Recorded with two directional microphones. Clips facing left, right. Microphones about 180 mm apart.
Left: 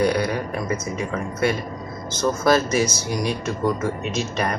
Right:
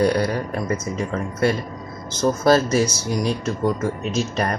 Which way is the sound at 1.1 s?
35° right (ahead or behind).